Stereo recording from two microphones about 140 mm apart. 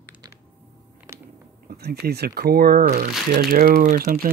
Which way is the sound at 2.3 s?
90° right.